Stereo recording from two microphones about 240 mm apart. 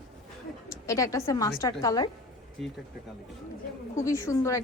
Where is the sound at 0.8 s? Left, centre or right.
Centre.